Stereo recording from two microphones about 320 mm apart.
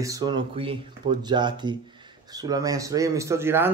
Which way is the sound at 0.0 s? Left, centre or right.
Centre.